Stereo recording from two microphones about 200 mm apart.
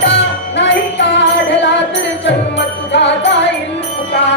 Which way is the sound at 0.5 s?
60° left (ahead or behind).